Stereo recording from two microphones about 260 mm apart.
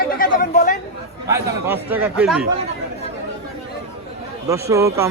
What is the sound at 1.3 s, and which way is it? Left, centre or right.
A man's voice, centre.